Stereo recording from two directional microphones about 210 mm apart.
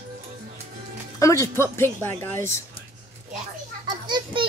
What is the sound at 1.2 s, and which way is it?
Speech, 15° left (ahead or behind).